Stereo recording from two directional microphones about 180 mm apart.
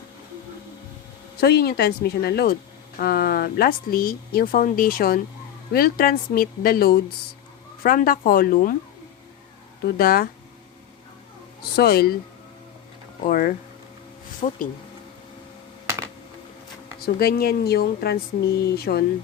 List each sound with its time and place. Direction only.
1.4 s speech: 60° left (ahead or behind)
9.8 s speech: 55° left (ahead or behind)
11.8 s speech: 60° left (ahead or behind)
13.2 s speech: 55° left (ahead or behind)
17.0 s speech: 60° left (ahead or behind)